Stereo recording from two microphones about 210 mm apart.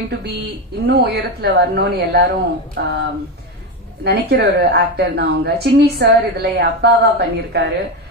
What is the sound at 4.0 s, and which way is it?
A woman's voice, 50° right (ahead or behind).